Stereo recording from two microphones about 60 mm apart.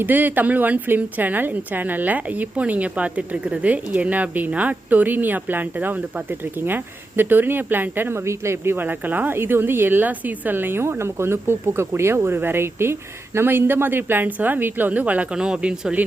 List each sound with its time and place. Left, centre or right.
0.0 s a woman's voice: right
8.2 s a woman's voice: right; by 16.0 s centre